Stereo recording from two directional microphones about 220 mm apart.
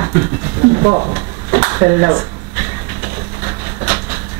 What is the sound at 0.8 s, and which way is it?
Speech, 30° right (ahead or behind).